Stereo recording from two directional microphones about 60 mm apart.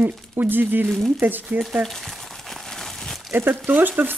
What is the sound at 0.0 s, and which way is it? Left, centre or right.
Speech, right.